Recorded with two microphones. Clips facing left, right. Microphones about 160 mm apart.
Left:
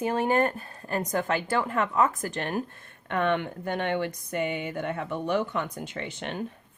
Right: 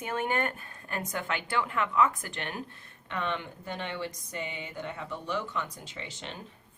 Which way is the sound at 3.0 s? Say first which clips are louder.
Left 8 dB; 55° left (ahead or behind).